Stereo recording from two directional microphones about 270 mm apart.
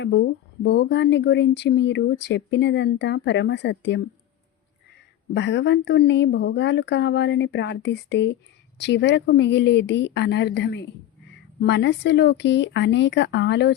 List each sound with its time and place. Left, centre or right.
0.0 s speech: left
5.3 s speech: left